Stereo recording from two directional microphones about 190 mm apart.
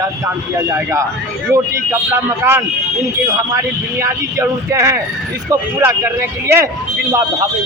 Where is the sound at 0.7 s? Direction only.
15° right (ahead or behind).